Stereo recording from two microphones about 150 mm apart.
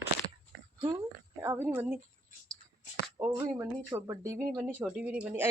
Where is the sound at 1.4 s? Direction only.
15° right (ahead or behind).